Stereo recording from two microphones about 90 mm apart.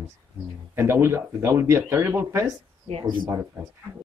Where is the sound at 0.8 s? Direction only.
30° right (ahead or behind).